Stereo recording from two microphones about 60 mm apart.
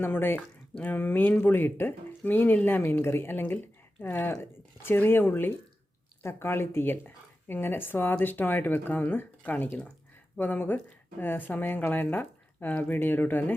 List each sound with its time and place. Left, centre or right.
0.0 s speech: left
0.3 s speech: centre
0.9 s speech: left